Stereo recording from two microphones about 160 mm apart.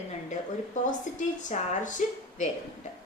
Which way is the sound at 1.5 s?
50° left (ahead or behind).